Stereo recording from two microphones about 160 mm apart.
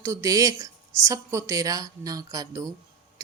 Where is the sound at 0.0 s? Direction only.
20° right (ahead or behind).